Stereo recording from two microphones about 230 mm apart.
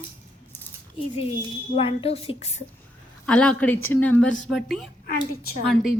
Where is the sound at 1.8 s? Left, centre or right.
Left.